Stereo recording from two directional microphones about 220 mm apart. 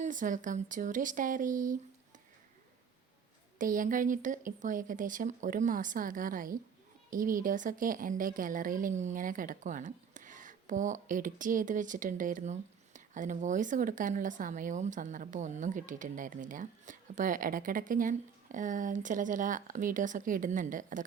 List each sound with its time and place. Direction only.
0.0 s a woman's voice: 35° right (ahead or behind)
3.6 s a woman's voice: 35° right (ahead or behind)